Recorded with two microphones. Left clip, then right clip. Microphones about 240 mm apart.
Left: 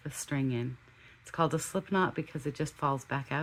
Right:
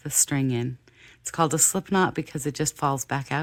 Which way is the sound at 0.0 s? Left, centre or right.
Right.